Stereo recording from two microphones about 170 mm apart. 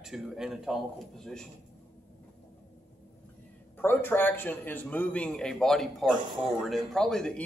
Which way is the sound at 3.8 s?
10° left (ahead or behind).